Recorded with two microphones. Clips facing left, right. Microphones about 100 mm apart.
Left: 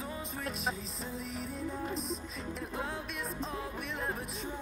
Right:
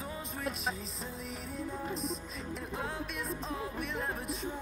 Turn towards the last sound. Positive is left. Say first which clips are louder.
# right 1 dB
turn(degrees=0)  # may be behind; listen again after turning